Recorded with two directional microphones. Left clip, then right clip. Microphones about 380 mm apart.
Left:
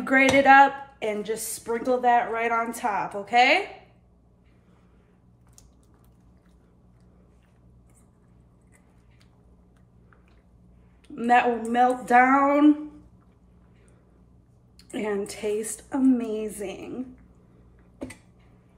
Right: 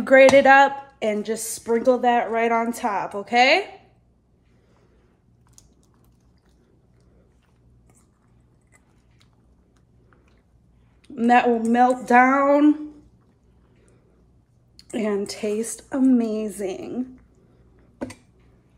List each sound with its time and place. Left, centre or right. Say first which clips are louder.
0.0 s a woman's voice: right 6 dB; right
11.1 s a woman's voice: right 3 dB; right
14.8 s a woman's voice: right 4 dB; right